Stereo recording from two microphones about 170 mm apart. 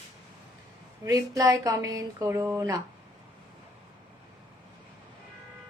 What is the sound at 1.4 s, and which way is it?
Speech, 20° right (ahead or behind).